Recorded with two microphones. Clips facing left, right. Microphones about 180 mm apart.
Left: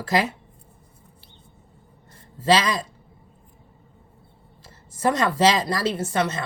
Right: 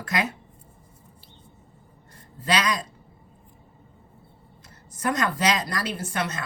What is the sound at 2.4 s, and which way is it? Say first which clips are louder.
Speech: left 5 dB; 25° left (ahead or behind).